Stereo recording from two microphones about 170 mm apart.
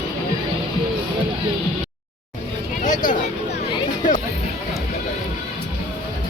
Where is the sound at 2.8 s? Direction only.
50° left (ahead or behind).